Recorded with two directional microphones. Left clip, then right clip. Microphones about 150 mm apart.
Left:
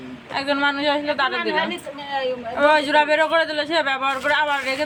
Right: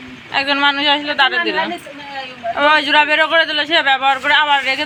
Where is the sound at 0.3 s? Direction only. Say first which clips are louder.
Right 6 dB; 5° right (ahead or behind).